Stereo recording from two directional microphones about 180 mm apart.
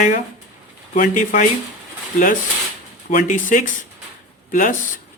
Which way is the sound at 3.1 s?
45° left (ahead or behind).